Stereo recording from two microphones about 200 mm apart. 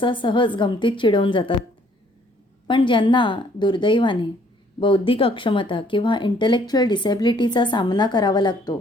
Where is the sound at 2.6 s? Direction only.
25° left (ahead or behind).